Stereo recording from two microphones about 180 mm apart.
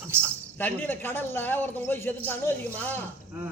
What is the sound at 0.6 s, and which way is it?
Speech, 10° left (ahead or behind).